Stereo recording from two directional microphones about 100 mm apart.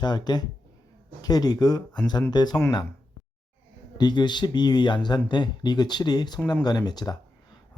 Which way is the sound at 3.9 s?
45° left (ahead or behind).